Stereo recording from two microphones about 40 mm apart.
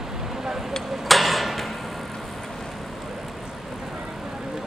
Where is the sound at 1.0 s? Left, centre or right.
Centre.